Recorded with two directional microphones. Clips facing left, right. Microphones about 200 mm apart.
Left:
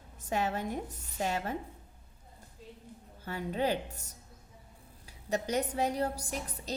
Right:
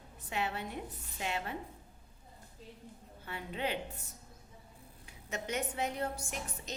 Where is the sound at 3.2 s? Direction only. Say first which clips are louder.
Left 6 dB; 40° left (ahead or behind).